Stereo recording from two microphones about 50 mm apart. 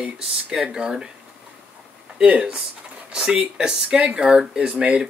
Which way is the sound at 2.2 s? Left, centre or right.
Right.